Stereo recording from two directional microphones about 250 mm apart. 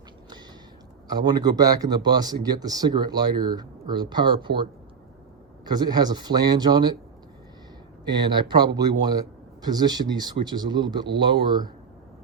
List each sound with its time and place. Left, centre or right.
1.0 s speech: centre
8.0 s speech: centre